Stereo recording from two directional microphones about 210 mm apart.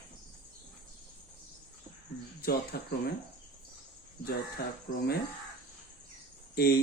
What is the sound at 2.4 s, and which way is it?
Speech, 50° left (ahead or behind).